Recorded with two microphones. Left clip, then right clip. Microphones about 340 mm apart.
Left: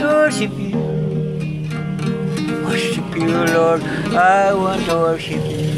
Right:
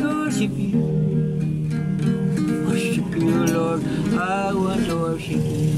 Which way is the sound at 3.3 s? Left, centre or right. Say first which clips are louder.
Left 5 dB; left.